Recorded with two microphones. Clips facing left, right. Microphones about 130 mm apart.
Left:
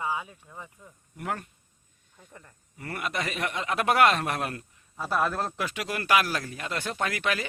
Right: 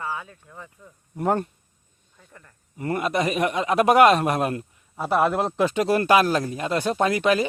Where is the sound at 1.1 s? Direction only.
35° right (ahead or behind).